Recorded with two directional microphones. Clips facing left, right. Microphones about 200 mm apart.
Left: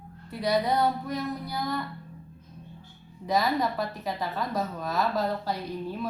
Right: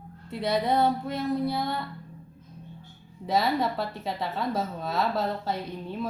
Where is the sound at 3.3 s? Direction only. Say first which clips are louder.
Even; 25° right (ahead or behind).